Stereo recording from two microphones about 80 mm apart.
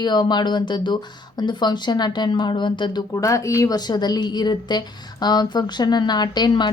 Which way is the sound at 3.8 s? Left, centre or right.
Left.